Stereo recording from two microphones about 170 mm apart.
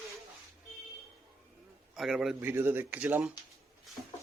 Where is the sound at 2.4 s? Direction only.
15° right (ahead or behind).